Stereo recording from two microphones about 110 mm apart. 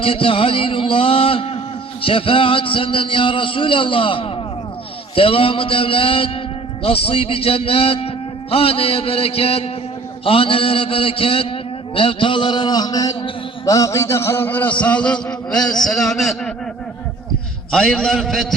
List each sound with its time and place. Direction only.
0.0 s a man's voice: 55° left (ahead or behind); by 16.5 s centre (ahead or behind)
17.7 s a man's voice: 5° left (ahead or behind)